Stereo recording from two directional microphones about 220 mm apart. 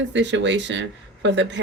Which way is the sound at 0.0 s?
55° right (ahead or behind).